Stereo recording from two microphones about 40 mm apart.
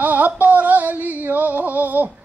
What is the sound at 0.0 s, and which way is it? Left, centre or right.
Music, right.